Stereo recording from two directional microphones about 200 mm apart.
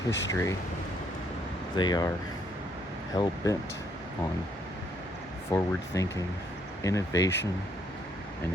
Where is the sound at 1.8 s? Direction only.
20° left (ahead or behind).